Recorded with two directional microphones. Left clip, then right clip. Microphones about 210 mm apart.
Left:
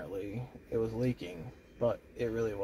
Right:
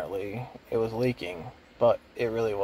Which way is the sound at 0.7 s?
15° right (ahead or behind).